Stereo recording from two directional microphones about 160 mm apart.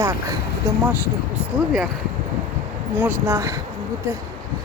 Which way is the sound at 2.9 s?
15° right (ahead or behind).